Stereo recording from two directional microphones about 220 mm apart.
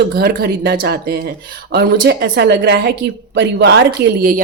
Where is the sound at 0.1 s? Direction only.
45° right (ahead or behind).